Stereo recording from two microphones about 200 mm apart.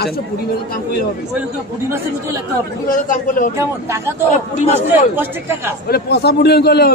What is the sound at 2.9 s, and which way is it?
Speech, 40° left (ahead or behind).